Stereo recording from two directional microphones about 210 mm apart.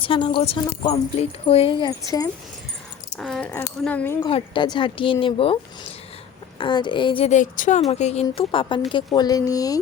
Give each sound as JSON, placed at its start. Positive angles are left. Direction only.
{"t": 0.0, "sound": "speech", "side_deg": 25}
{"t": 3.2, "sound": "speech", "side_deg": 0}
{"t": 4.3, "sound": "speech", "side_deg": 25}
{"t": 6.6, "sound": "speech", "side_deg": 20}